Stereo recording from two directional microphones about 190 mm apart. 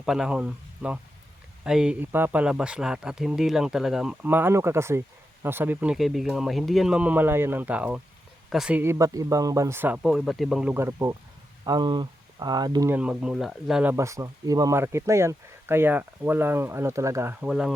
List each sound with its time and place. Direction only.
0.0 s speech: 5° right (ahead or behind); by 13.0 s 20° right (ahead or behind)
13.0 s speech: 5° right (ahead or behind)
13.9 s speech: 15° right (ahead or behind)
17.4 s speech: 5° right (ahead or behind)